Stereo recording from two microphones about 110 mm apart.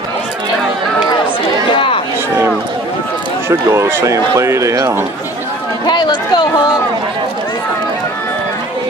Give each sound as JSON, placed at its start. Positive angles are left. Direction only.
{"t": 1.7, "sound": "a sound", "side_deg": 50}
{"t": 3.4, "sound": "speech", "side_deg": -25}
{"t": 5.9, "sound": "speech", "side_deg": 40}